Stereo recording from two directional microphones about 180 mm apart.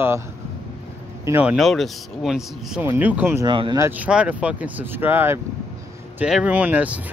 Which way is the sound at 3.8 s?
10° right (ahead or behind).